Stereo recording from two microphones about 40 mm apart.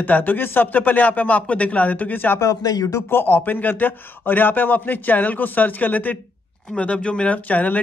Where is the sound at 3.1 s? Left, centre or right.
Left.